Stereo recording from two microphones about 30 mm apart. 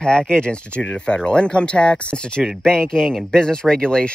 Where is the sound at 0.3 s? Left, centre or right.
Left.